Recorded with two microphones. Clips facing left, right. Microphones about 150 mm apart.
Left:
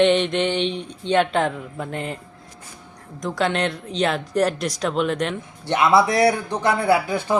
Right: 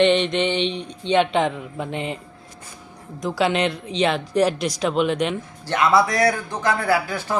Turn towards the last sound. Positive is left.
turn(degrees=20)  # may be behind; listen again after turning